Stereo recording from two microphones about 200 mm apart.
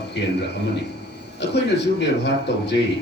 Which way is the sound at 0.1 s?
55° left (ahead or behind).